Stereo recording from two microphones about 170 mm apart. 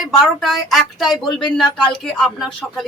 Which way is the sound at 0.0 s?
Centre (ahead or behind).